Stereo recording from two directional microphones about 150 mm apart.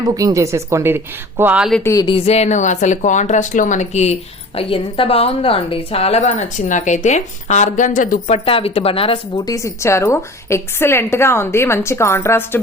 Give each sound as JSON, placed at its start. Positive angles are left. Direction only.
{"t": 0.0, "sound": "a woman's voice", "side_deg": -25}
{"t": 1.8, "sound": "a woman's voice", "side_deg": 20}
{"t": 2.0, "sound": "speech", "side_deg": 40}
{"t": 8.3, "sound": "speech", "side_deg": 40}
{"t": 9.5, "sound": "a woman's voice", "side_deg": 20}